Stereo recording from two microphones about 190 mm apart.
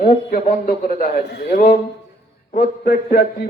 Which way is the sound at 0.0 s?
50° left (ahead or behind).